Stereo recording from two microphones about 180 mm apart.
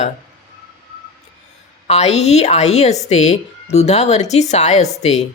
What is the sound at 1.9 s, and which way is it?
Speech, 35° left (ahead or behind).